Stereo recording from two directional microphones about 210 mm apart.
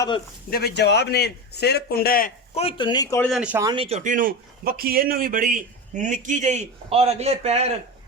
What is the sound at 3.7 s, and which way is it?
A man's voice, 25° right (ahead or behind).